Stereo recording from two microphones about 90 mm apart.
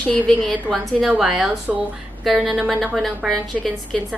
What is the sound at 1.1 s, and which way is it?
Speech, 10° right (ahead or behind).